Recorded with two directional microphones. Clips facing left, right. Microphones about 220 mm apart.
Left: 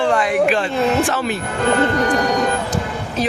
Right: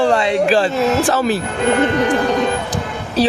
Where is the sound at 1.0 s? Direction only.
35° right (ahead or behind).